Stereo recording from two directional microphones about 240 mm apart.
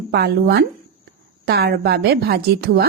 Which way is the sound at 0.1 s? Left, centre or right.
Right.